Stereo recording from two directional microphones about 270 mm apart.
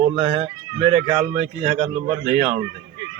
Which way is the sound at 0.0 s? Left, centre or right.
Right.